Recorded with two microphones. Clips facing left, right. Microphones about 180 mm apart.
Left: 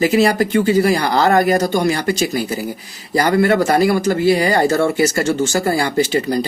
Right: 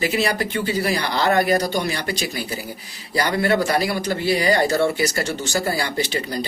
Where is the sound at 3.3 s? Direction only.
55° left (ahead or behind).